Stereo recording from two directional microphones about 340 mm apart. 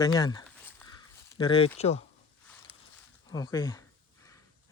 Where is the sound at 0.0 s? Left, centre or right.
Centre.